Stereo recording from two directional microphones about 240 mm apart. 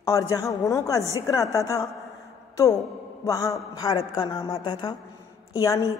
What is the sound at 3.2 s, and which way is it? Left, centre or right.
A man's voice, centre.